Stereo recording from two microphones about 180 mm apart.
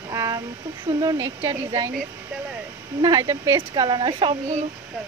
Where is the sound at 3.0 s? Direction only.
20° right (ahead or behind).